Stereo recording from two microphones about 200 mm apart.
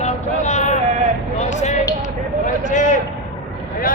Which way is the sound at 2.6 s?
40° left (ahead or behind).